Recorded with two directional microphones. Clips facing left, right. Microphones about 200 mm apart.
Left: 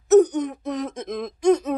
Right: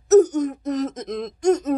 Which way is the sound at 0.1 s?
Centre (ahead or behind).